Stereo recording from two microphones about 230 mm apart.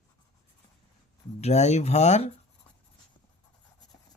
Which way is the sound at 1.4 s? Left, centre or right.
Left.